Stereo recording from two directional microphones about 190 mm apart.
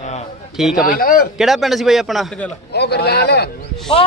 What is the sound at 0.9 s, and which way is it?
Speech, 50° left (ahead or behind).